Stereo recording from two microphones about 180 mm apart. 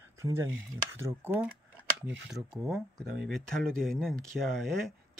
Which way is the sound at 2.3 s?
Centre (ahead or behind).